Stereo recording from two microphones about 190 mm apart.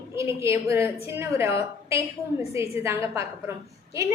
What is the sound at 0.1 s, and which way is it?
A woman's voice, 15° right (ahead or behind).